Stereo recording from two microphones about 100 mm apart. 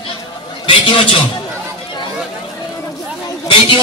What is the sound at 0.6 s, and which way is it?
Speech, 60° left (ahead or behind).